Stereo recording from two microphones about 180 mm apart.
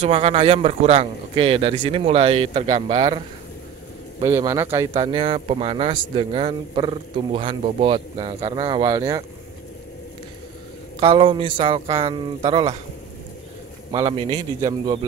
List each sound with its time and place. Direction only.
0.0 s a man's voice: 35° right (ahead or behind); by 4.8 s 15° right (ahead or behind)
4.9 s a man's voice: 30° right (ahead or behind)
11.0 s a man's voice: 30° right (ahead or behind)
13.9 s a man's voice: 30° right (ahead or behind)